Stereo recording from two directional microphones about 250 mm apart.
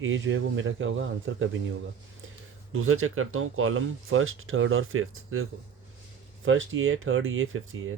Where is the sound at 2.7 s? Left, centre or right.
Right.